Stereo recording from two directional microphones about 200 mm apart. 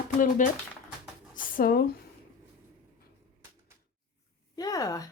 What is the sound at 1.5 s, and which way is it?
Speech, 50° left (ahead or behind).